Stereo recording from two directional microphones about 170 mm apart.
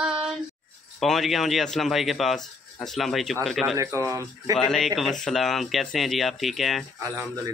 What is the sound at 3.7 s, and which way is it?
Speech, 20° right (ahead or behind).